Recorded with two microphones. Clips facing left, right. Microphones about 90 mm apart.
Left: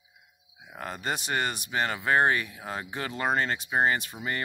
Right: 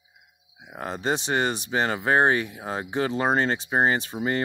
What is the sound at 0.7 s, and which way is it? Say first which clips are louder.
Speech: right 6 dB; 25° right (ahead or behind).